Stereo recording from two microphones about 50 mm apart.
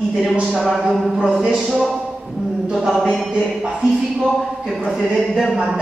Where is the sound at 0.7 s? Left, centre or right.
Centre.